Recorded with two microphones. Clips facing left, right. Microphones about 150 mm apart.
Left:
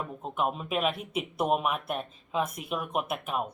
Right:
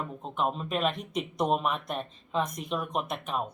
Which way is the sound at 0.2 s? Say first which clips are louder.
Even; 5° left (ahead or behind).